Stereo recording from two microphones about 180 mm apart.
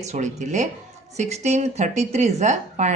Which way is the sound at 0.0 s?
40° right (ahead or behind).